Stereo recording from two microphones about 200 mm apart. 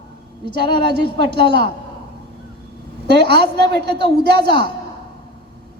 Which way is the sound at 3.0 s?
55° right (ahead or behind).